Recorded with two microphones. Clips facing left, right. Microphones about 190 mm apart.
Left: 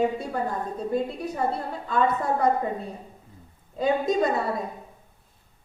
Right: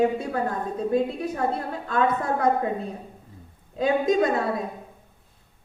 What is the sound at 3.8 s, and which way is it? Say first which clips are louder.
Speech: right 2 dB; 70° right (ahead or behind).